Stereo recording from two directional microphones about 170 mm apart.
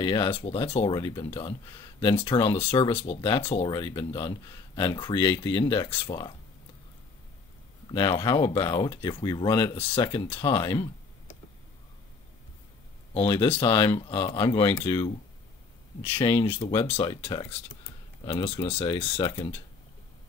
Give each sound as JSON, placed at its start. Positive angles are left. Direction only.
{"t": 0.0, "sound": "speech", "side_deg": 30}
{"t": 7.9, "sound": "speech", "side_deg": 30}
{"t": 13.2, "sound": "speech", "side_deg": 20}
{"t": 16.2, "sound": "speech", "side_deg": 30}